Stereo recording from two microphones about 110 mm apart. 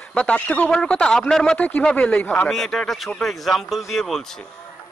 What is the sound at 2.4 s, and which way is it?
Speech, centre (ahead or behind).